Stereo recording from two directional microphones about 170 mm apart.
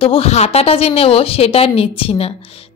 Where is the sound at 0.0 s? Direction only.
35° left (ahead or behind).